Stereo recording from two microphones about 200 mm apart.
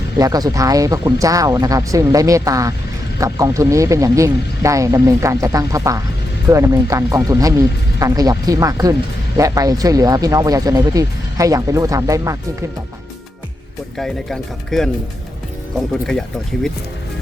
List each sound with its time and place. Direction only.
0.2 s speech: 20° right (ahead or behind)
14.0 s speech: centre (ahead or behind)